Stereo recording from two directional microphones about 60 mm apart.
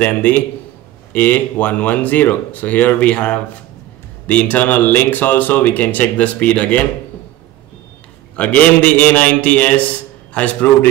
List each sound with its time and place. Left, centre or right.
0.0 s speech: left
8.4 s speech: left